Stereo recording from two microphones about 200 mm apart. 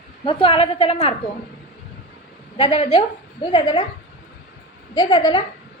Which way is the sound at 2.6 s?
30° left (ahead or behind).